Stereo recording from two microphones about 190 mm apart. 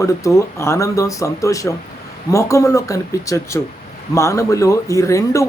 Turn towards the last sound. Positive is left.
turn(degrees=15)  # may be behind; listen again after turning